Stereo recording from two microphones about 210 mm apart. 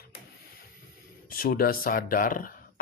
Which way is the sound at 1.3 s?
45° left (ahead or behind).